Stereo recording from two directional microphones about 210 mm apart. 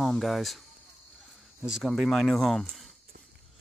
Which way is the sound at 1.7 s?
Centre (ahead or behind).